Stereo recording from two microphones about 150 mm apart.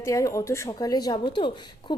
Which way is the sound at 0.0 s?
20° left (ahead or behind).